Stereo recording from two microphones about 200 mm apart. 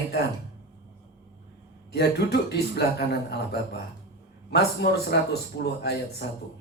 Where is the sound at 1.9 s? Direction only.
55° left (ahead or behind).